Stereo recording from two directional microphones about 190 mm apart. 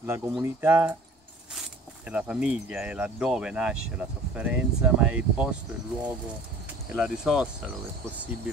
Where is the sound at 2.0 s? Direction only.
5° right (ahead or behind).